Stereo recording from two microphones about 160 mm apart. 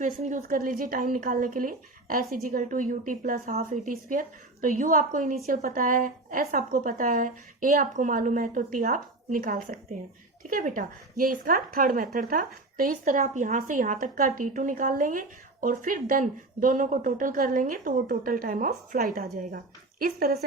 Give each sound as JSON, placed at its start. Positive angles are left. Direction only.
{"t": 0.0, "sound": "a woman's voice", "side_deg": -55}
{"t": 19.4, "sound": "a woman's voice", "side_deg": -60}